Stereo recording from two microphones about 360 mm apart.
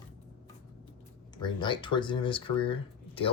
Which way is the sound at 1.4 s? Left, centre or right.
Centre.